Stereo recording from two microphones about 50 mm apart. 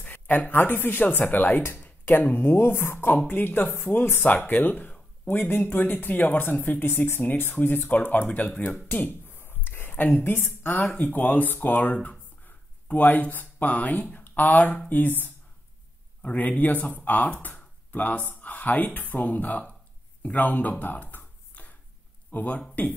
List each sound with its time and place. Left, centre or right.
0.0 s speech: left
3.3 s speech: left
9.3 s a sound: left
10.4 s a woman's voice: left
10.9 s speech: left
20.7 s a sound: left
22.3 s speech: left